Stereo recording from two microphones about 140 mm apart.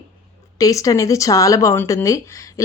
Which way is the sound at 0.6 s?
25° left (ahead or behind).